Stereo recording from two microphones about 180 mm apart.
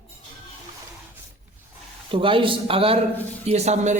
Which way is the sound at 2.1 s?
30° right (ahead or behind).